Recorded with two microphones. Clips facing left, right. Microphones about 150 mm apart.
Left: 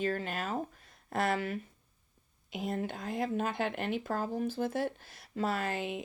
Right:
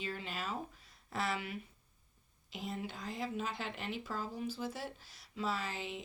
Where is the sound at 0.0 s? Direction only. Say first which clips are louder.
Left 8 dB; 50° left (ahead or behind).